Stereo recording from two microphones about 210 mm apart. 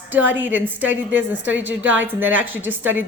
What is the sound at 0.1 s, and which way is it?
Speech, 10° right (ahead or behind).